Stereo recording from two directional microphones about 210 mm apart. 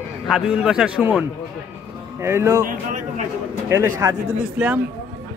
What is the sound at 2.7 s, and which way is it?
Speech, 35° right (ahead or behind).